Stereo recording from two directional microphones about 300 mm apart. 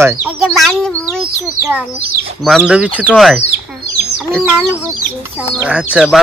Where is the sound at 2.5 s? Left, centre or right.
Centre.